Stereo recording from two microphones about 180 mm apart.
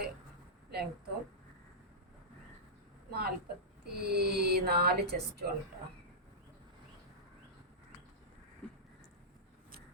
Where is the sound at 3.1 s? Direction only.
60° right (ahead or behind).